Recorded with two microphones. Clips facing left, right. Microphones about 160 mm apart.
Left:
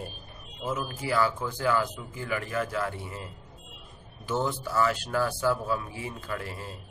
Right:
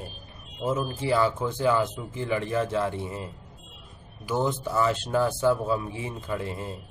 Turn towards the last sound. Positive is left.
turn(degrees=-20)  # may be behind; listen again after turning